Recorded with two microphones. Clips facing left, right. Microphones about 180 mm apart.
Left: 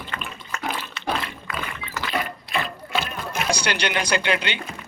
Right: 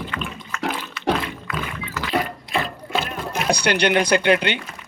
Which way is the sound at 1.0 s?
25° left (ahead or behind).